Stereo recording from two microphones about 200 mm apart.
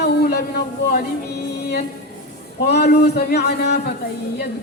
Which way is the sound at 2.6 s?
55° left (ahead or behind).